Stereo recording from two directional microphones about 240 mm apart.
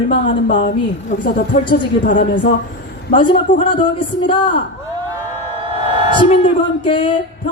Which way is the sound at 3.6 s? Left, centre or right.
Centre.